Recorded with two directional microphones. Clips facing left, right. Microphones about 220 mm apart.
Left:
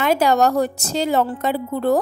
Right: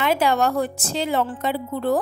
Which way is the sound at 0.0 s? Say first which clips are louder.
Left 3 dB; 45° left (ahead or behind).